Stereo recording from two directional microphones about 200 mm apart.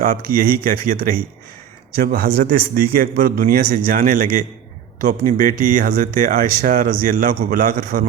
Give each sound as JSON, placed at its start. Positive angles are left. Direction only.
{"t": 0.0, "sound": "speech", "side_deg": -45}